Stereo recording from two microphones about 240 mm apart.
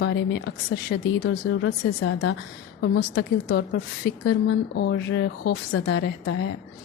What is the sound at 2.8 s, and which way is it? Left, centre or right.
A woman's voice, left.